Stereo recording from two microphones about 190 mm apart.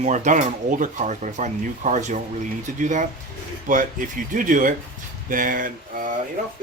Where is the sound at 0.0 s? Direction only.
40° right (ahead or behind).